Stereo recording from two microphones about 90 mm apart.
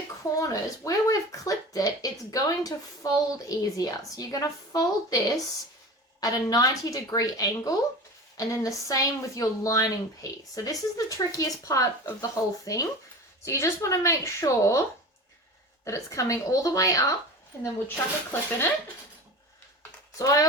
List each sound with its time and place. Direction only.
0.3 s speech: 40° left (ahead or behind)
17.6 s speech: 25° left (ahead or behind)
20.1 s speech: 40° left (ahead or behind)